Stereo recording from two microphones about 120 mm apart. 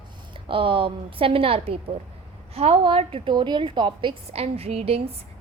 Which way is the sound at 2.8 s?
45° right (ahead or behind).